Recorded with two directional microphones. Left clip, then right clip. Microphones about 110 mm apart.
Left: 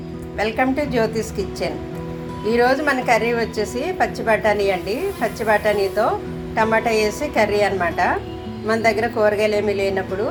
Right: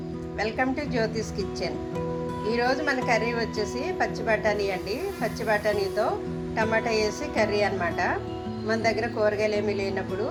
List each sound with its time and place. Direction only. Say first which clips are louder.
0.3 s a woman's voice: left 8 dB; 10° left (ahead or behind)